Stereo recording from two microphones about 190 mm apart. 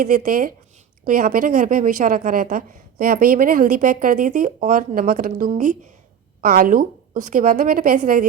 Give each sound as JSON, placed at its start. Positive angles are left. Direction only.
{"t": 0.0, "sound": "a woman's voice", "side_deg": -45}
{"t": 6.4, "sound": "a woman's voice", "side_deg": -50}